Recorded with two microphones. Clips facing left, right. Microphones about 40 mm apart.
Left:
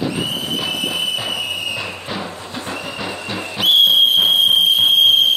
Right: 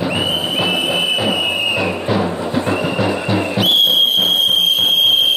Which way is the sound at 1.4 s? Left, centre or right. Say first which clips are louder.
Right 6 dB; right.